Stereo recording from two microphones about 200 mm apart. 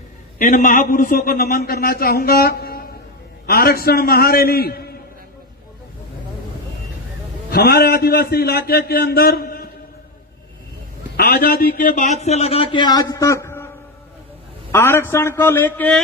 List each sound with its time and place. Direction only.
0.3 s a man's voice: 40° left (ahead or behind)
7.5 s a man's voice: 50° left (ahead or behind)
11.2 s a man's voice: 50° left (ahead or behind); by 13.7 s 10° left (ahead or behind)
14.7 s a man's voice: 10° left (ahead or behind)